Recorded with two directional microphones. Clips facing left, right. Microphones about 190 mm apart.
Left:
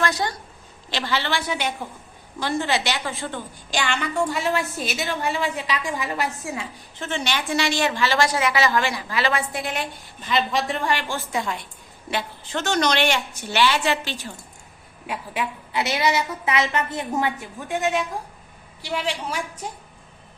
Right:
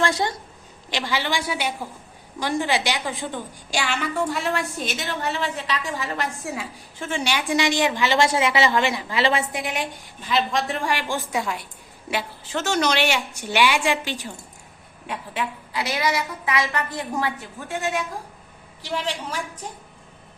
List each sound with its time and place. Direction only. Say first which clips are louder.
0.0 s a woman's voice: right 1 dB; 25° right (ahead or behind)
0.9 s a woman's voice: even; 15° right (ahead or behind)
9.6 s a woman's voice: even; 15° right (ahead or behind)
10.2 s a woman's voice: even; centre (ahead or behind)
10.8 s a woman's voice: even; 10° right (ahead or behind)
15.0 s a woman's voice: left 1 dB; 10° left (ahead or behind)
15.7 s a woman's voice: left 3 dB; 25° left (ahead or behind); by 19.6 s 10° left (ahead or behind)